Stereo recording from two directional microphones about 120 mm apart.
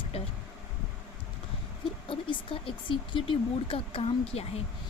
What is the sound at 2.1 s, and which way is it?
Speech, 45° left (ahead or behind).